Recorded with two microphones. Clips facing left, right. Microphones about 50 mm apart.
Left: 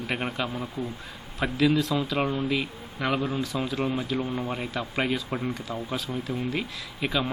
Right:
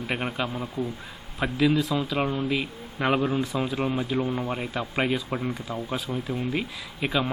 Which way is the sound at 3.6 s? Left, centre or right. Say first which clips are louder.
Right 1 dB; centre.